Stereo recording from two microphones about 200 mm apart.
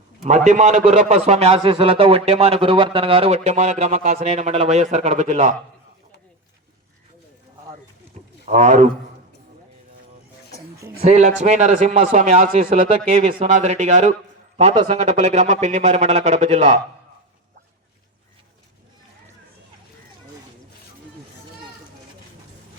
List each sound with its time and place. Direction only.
0.2 s a man's voice: 35° right (ahead or behind)
8.4 s a man's voice: 35° right (ahead or behind)
11.0 s a man's voice: 35° right (ahead or behind)